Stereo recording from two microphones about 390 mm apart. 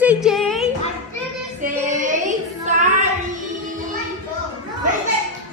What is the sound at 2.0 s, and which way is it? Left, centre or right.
Child singing, centre.